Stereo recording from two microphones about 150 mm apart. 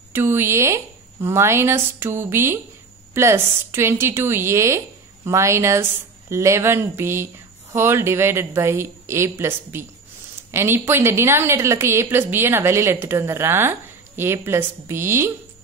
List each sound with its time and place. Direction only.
0.1 s a woman's voice: 15° right (ahead or behind)